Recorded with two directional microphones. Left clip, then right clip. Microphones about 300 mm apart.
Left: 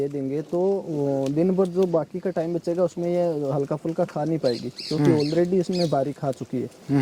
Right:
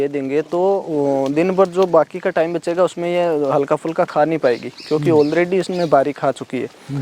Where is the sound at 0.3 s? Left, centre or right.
Centre.